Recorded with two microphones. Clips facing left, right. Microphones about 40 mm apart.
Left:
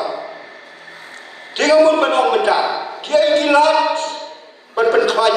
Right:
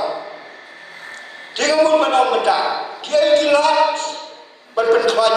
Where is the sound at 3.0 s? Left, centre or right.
Left.